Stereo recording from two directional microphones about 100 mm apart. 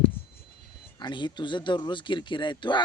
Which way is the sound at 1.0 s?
50° left (ahead or behind).